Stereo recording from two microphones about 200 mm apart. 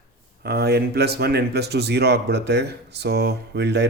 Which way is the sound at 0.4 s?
55° right (ahead or behind).